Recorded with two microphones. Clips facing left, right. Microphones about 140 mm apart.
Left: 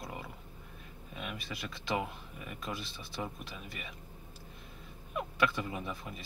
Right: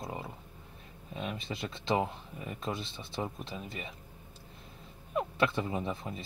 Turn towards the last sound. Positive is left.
turn(degrees=-25)  # may be behind; listen again after turning